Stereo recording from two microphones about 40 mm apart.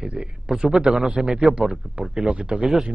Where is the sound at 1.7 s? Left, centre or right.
Right.